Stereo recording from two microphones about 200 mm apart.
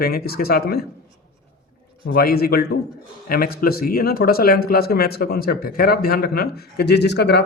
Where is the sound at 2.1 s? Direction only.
50° left (ahead or behind).